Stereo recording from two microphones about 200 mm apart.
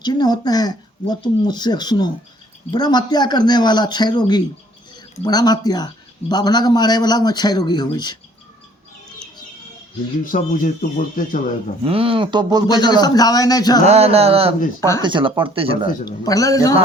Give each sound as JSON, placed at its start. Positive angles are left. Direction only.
{"t": 0.0, "sound": "speech", "side_deg": 20}
{"t": 10.2, "sound": "speech", "side_deg": 40}
{"t": 11.8, "sound": "speech", "side_deg": -30}
{"t": 12.6, "sound": "speech", "side_deg": 20}
{"t": 13.8, "sound": "a sound", "side_deg": -30}
{"t": 15.0, "sound": "speech", "side_deg": -25}
{"t": 16.0, "sound": "speech", "side_deg": 15}